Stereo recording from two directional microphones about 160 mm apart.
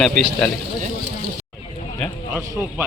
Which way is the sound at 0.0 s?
5° left (ahead or behind).